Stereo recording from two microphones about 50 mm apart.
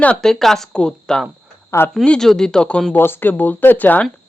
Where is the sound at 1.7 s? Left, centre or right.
Left.